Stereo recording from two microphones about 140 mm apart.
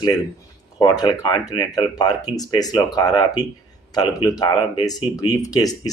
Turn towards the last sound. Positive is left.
turn(degrees=25)  # may be behind; listen again after turning